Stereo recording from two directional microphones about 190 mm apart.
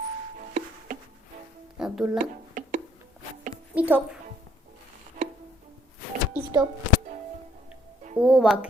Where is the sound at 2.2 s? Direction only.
45° right (ahead or behind).